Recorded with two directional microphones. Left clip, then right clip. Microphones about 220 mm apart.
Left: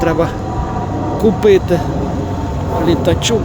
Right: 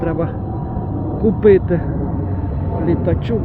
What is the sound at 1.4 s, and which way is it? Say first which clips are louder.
Speech: even; 10° left (ahead or behind).